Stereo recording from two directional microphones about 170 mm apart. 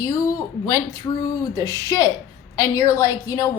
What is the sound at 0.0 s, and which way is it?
A woman's voice, 20° left (ahead or behind).